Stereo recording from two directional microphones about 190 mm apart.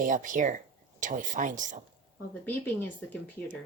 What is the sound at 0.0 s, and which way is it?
Speech, 45° right (ahead or behind).